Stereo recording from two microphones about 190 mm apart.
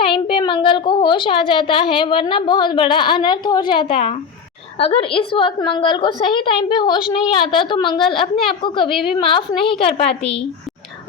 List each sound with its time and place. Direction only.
0.0 s a woman's voice: 25° left (ahead or behind)